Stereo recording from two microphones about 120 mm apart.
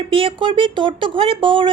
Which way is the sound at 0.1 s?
45° right (ahead or behind).